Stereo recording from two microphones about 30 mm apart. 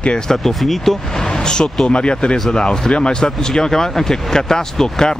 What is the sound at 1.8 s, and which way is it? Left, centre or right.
Speech, left.